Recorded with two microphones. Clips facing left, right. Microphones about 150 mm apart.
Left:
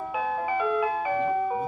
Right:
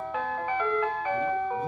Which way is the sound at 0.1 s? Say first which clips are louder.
Left 3 dB; 10° left (ahead or behind).